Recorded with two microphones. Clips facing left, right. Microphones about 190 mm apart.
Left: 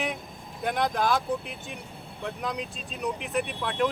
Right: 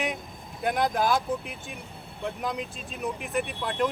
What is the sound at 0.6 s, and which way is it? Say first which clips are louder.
Speech: right 1 dB; centre (ahead or behind).